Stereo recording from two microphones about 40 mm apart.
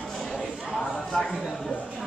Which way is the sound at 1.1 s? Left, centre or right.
Centre.